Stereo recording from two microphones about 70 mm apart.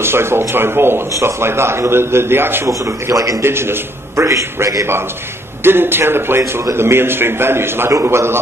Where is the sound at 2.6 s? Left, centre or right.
Right.